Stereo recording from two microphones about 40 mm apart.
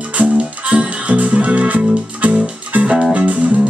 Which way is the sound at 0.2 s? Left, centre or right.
Right.